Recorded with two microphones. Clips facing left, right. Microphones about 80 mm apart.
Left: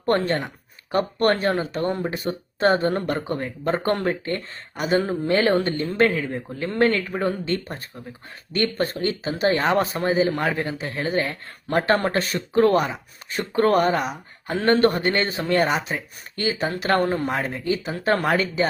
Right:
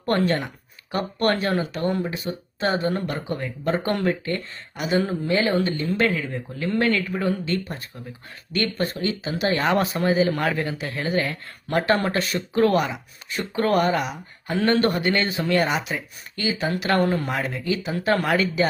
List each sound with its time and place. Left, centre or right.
0.0 s speech: left
2.0 s speech: left